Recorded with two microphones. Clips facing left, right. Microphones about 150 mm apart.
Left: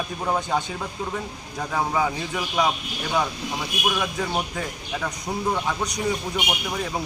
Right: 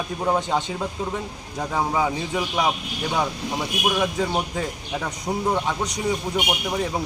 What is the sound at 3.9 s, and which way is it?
Speech, 20° right (ahead or behind).